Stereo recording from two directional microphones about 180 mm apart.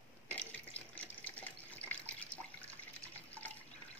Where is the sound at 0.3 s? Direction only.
10° left (ahead or behind).